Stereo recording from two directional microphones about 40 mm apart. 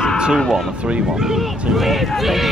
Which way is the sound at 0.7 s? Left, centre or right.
Right.